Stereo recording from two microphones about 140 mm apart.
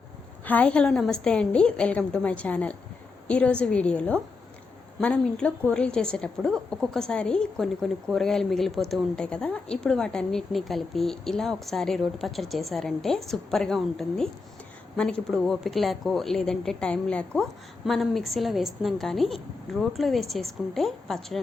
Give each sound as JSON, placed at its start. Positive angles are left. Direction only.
{"t": 0.4, "sound": "a woman's voice", "side_deg": 10}